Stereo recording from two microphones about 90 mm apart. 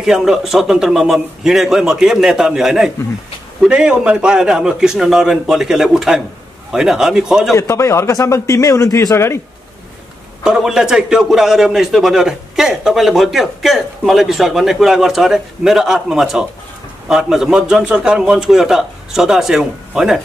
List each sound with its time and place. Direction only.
0.0 s a man's voice: 5° right (ahead or behind)
7.5 s a man's voice: 35° left (ahead or behind)
10.4 s a man's voice: 5° right (ahead or behind)